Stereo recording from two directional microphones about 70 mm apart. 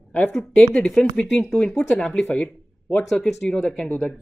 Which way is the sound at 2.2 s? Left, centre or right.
Left.